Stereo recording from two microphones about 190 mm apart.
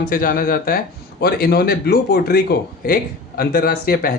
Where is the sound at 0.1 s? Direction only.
45° left (ahead or behind).